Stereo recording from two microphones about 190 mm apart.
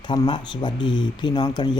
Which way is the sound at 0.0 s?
25° left (ahead or behind).